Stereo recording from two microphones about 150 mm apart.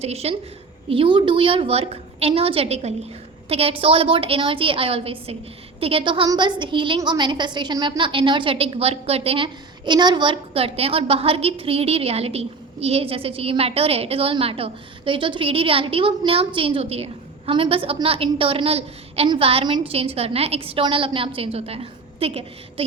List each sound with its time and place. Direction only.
0.0 s a woman's voice: 45° right (ahead or behind)